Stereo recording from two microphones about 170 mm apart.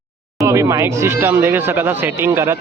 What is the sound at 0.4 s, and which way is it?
Speech, 20° right (ahead or behind).